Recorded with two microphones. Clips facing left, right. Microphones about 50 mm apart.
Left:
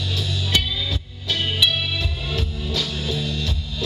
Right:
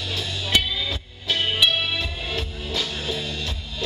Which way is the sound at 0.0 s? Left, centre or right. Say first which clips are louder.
Left 2 dB; centre.